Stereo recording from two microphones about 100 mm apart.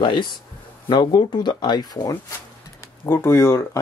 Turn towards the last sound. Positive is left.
turn(degrees=25)  # may be behind; listen again after turning